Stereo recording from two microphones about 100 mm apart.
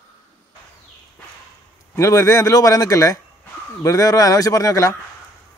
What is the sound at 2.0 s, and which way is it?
A man's voice, 30° left (ahead or behind).